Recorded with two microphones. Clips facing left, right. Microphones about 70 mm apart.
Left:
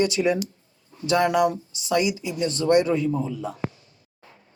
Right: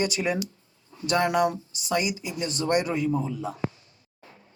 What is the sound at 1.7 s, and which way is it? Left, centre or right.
Speech, centre.